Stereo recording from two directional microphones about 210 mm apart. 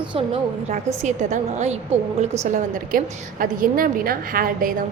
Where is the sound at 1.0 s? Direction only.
35° right (ahead or behind).